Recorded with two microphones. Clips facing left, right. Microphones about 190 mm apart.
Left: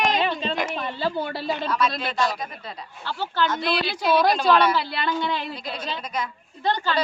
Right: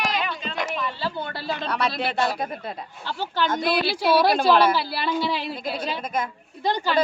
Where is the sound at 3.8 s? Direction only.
5° right (ahead or behind).